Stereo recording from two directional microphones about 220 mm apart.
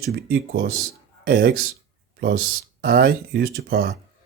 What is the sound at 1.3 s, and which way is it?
Speech, 45° right (ahead or behind).